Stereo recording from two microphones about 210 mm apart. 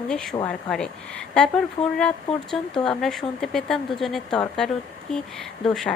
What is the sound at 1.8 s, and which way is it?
Speech, 25° left (ahead or behind).